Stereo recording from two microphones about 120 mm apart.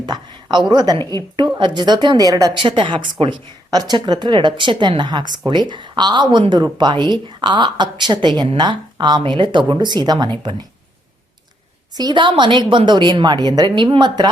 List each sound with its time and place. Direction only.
0.0 s a sound: 35° right (ahead or behind)
0.7 s speech: 35° right (ahead or behind)
2.6 s speech: 45° right (ahead or behind)
11.9 s speech: 40° right (ahead or behind)